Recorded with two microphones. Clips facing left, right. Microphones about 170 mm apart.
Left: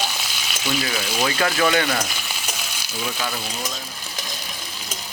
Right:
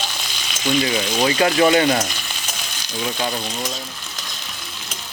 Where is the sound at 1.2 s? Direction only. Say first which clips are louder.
Right 5 dB; 20° right (ahead or behind).